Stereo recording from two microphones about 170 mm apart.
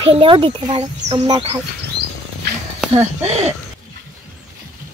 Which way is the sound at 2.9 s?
40° right (ahead or behind).